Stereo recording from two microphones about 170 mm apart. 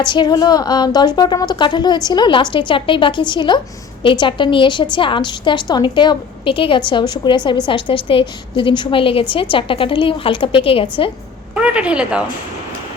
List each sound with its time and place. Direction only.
0.0 s a woman's voice: 25° left (ahead or behind)
11.5 s a woman's voice: 5° right (ahead or behind)